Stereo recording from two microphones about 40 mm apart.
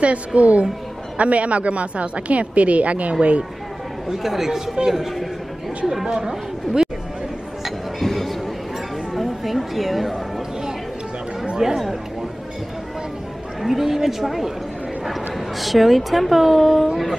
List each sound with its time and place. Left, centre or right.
0.0 s a woman's voice: right
4.1 s speech: centre
8.0 s a sound: centre
11.5 s chatter: centre
13.6 s a sound: centre
15.0 s speech: centre